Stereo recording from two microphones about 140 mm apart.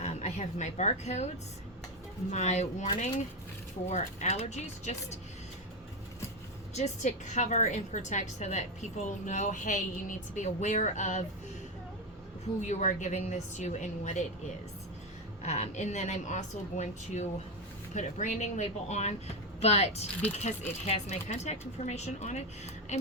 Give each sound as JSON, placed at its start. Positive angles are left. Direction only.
{"t": 0.0, "sound": "a woman's voice", "side_deg": 50}
{"t": 2.3, "sound": "speech", "side_deg": 55}
{"t": 3.8, "sound": "speech", "side_deg": 50}
{"t": 6.7, "sound": "a woman's voice", "side_deg": 55}
{"t": 12.6, "sound": "a woman's voice", "side_deg": 60}
{"t": 15.4, "sound": "a woman's voice", "side_deg": 55}